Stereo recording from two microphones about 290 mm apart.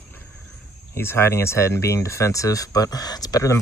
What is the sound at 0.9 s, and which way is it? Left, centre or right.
Speech, centre.